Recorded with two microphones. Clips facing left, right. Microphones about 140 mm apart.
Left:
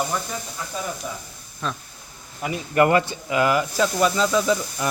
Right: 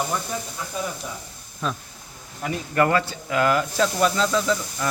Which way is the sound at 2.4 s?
15° left (ahead or behind).